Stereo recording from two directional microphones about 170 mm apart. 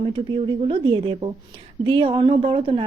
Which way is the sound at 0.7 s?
30° right (ahead or behind).